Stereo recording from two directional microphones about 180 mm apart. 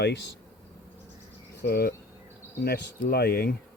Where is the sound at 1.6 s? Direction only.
60° left (ahead or behind).